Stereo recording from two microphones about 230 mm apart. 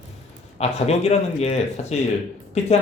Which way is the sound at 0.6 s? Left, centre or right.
Left.